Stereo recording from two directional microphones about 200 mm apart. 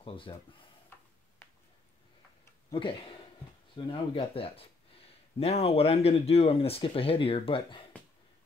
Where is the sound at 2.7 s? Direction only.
25° left (ahead or behind).